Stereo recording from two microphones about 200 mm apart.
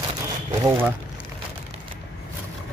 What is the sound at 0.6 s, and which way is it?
Speech, 10° right (ahead or behind).